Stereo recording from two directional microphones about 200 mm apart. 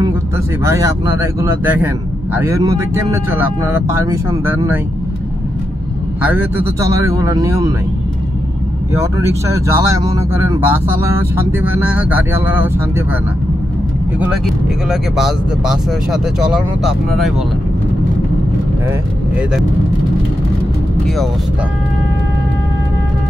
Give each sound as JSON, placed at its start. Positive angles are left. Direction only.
{"t": 0.7, "sound": "speech", "side_deg": -15}
{"t": 6.3, "sound": "speech", "side_deg": -10}
{"t": 9.5, "sound": "speech", "side_deg": -15}
{"t": 14.2, "sound": "speech", "side_deg": -5}